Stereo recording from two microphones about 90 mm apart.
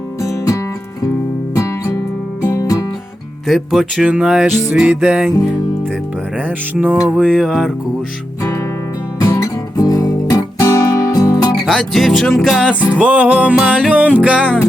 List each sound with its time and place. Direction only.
0.2 s music: 35° left (ahead or behind)
2.4 s music: 40° left (ahead or behind)
3.4 s music: centre (ahead or behind); by 7.0 s 15° right (ahead or behind)
7.0 s music: 5° right (ahead or behind)
9.2 s guitar: 40° left (ahead or behind)
11.6 s music: centre (ahead or behind)
12.9 s music: 15° right (ahead or behind)